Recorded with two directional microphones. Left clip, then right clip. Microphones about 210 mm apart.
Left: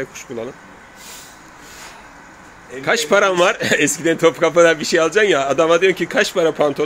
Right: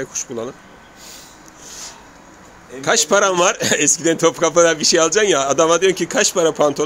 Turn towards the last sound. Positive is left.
turn(degrees=-5)  # may be behind; listen again after turning